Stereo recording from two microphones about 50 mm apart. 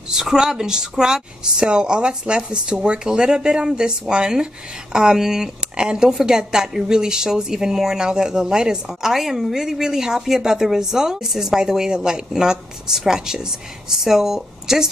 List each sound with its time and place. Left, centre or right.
0.1 s speech: centre